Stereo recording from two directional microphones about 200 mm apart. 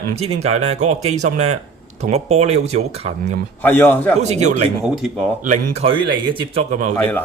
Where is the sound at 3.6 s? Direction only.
10° left (ahead or behind).